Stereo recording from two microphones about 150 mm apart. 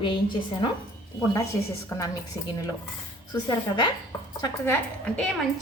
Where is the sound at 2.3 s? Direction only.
20° left (ahead or behind).